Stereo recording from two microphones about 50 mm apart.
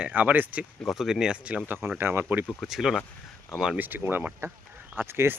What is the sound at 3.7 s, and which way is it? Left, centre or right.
Speech, right.